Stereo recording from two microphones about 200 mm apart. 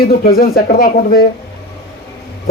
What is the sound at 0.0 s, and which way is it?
A man's voice, 50° left (ahead or behind).